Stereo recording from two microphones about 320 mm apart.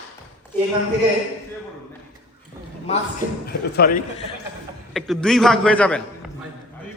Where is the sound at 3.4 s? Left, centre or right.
Left.